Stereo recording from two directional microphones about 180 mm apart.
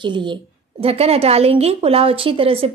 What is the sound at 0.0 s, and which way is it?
A woman's voice, 25° right (ahead or behind).